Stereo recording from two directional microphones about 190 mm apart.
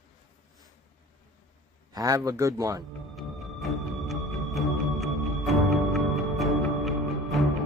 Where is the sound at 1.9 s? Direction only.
20° right (ahead or behind).